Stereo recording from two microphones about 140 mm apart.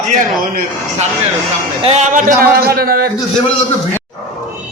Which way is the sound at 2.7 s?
90° right.